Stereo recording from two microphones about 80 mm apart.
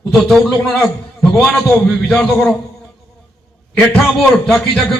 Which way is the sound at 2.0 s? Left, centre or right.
Centre.